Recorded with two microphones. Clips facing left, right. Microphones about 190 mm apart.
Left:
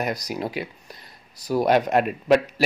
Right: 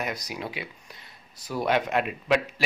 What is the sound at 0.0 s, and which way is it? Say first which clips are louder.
A man's voice: left 6 dB; 40° left (ahead or behind).